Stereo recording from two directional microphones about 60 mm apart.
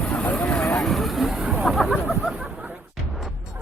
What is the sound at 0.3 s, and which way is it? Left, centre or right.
Vehicle, left.